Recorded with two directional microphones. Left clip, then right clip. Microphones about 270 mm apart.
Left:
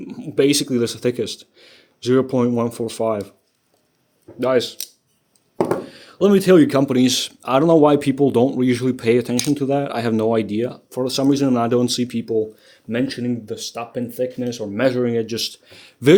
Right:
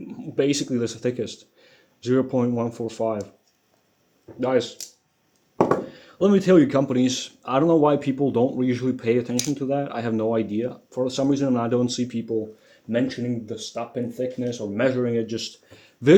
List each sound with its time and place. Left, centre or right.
0.1 s speech: left
4.4 s speech: left